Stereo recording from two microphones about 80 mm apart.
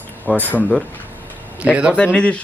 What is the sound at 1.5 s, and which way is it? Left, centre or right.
Speech, centre.